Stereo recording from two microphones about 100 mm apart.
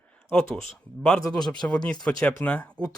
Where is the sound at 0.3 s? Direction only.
10° left (ahead or behind).